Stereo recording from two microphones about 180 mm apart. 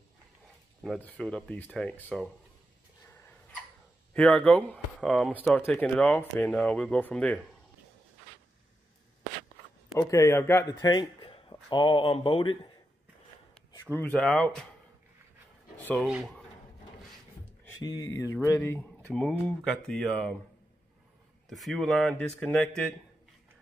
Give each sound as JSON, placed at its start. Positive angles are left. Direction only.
{"t": 0.8, "sound": "speech", "side_deg": 5}
{"t": 3.1, "sound": "dog", "side_deg": 15}
{"t": 4.1, "sound": "speech", "side_deg": 5}
{"t": 9.9, "sound": "a man's voice", "side_deg": 15}
{"t": 13.9, "sound": "speech", "side_deg": 10}
{"t": 15.8, "sound": "speech", "side_deg": 10}
{"t": 16.1, "sound": "speech", "side_deg": 0}
{"t": 17.8, "sound": "speech", "side_deg": 20}
{"t": 21.5, "sound": "speech", "side_deg": 0}